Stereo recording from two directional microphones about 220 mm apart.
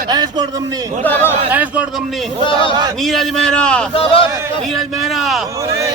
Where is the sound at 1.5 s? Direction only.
5° right (ahead or behind).